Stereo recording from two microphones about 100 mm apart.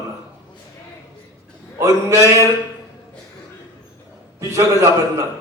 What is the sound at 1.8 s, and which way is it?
Speech, 30° right (ahead or behind).